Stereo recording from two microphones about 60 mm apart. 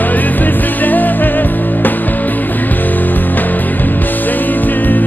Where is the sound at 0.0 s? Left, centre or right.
Left.